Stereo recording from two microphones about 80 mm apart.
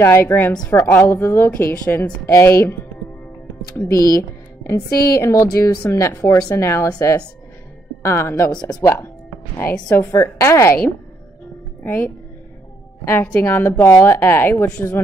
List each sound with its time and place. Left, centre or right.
0.0 s a woman's voice: left
0.7 s a woman's voice: left
3.7 s speech: left
6.5 s speech: left
9.9 s speech: left
11.8 s a woman's voice: left
13.7 s speech: left
14.0 s speech: left